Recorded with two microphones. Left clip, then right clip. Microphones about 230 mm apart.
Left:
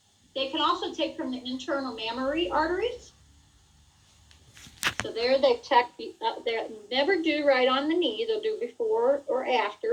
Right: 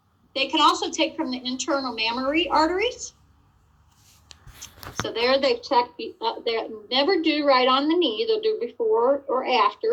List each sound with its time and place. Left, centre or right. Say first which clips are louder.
0.3 s a woman's voice: right 7 dB; right
4.9 s a woman's voice: right 4 dB; right